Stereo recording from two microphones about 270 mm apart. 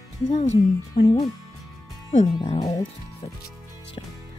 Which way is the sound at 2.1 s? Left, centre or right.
Centre.